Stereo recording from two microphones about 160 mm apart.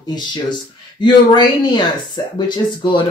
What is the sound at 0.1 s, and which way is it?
Speech, 30° left (ahead or behind).